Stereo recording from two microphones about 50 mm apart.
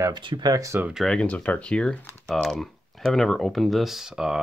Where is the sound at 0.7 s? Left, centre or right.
Right.